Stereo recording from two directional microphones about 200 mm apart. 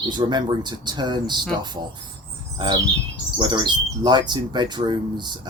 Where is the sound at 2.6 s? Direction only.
20° right (ahead or behind).